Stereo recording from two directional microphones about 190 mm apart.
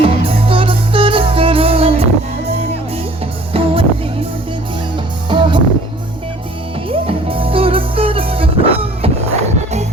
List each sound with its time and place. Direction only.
0.0 s music: 30° right (ahead or behind)
3.5 s music: 30° right (ahead or behind)
5.3 s music: 25° right (ahead or behind)
6.8 s music: 30° right (ahead or behind)